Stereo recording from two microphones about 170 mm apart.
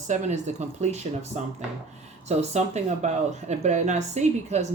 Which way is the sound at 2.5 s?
40° right (ahead or behind).